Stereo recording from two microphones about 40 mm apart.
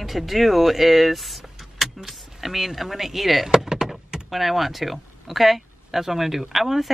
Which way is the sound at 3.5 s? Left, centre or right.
Centre.